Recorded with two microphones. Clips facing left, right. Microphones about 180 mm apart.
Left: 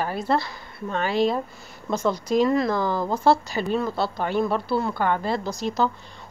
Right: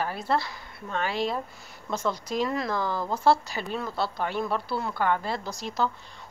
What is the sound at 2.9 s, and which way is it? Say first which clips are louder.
Speech: left 5 dB; 25° left (ahead or behind).